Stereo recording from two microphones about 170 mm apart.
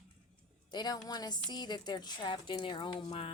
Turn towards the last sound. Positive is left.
turn(degrees=30)  # may be behind; listen again after turning